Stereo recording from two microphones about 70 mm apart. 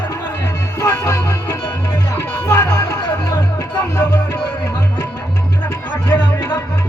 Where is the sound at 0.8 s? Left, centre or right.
Left.